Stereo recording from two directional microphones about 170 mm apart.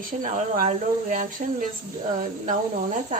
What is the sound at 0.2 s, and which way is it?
Speech, 55° right (ahead or behind).